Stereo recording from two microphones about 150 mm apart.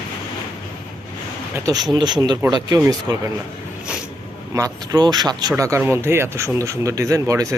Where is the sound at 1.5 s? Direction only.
25° right (ahead or behind).